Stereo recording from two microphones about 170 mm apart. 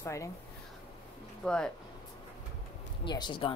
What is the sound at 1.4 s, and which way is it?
Speech, 5° left (ahead or behind).